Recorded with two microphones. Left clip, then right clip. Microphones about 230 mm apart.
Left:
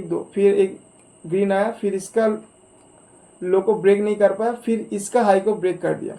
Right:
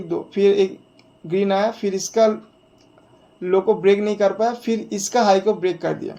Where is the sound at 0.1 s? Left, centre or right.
Right.